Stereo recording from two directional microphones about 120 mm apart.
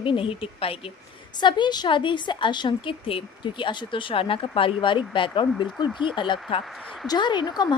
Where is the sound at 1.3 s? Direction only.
40° left (ahead or behind).